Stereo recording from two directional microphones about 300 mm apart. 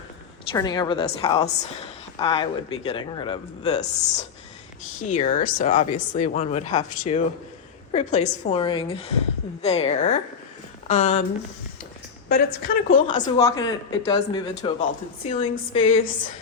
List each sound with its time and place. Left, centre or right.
0.5 s speech: centre
12.3 s speech: left
13.3 s speech: centre
15.8 s a sound: left